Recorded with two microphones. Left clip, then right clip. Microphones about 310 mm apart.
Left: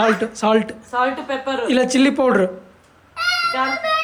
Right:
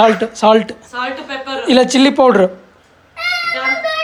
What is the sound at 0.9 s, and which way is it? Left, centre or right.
Speech, left.